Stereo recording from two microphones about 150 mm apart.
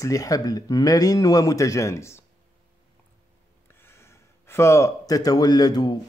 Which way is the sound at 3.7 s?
15° left (ahead or behind).